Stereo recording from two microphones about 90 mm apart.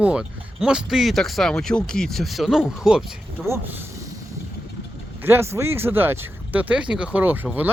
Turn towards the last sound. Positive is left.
turn(degrees=-20)  # may be behind; listen again after turning